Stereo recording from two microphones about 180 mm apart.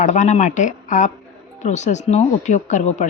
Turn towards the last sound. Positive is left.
turn(degrees=40)  # may be behind; listen again after turning